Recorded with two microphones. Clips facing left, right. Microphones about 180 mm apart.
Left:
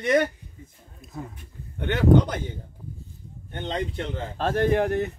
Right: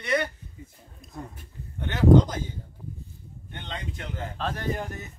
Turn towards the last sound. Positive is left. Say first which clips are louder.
# left 10 dB
turn(degrees=65)  # may be behind; listen again after turning